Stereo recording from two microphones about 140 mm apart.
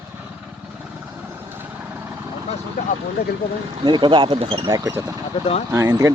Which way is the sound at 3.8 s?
35° right (ahead or behind).